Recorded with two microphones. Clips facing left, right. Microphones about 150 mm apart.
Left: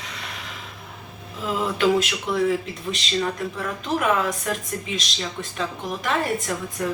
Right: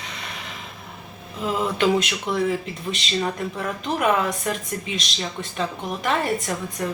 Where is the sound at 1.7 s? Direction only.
Centre (ahead or behind).